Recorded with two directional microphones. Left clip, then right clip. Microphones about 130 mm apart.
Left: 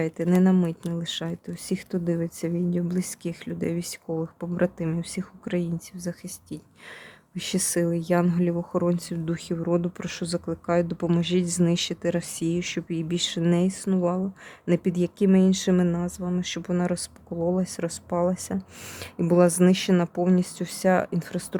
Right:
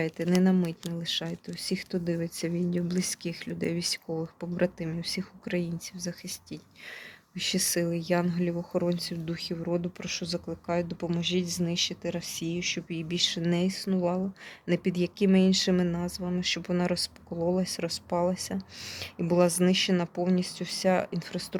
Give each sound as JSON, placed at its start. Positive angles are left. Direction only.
{"t": 0.0, "sound": "speech", "side_deg": 25}